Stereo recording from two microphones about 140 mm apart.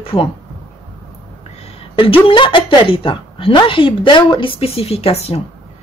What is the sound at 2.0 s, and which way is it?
A woman's voice, 40° left (ahead or behind).